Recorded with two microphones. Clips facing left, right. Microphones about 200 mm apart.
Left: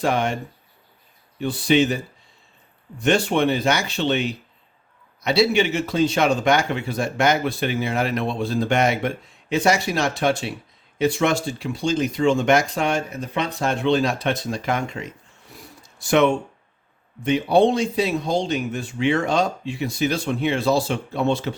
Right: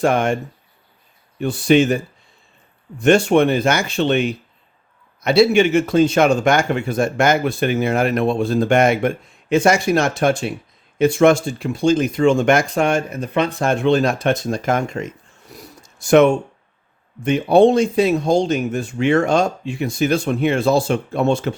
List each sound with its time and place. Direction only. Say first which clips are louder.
0.0 s speech: right 5 dB; 50° right (ahead or behind)
1.4 s speech: right 4 dB; 50° right (ahead or behind)
3.0 s speech: right 6 dB; 50° right (ahead or behind)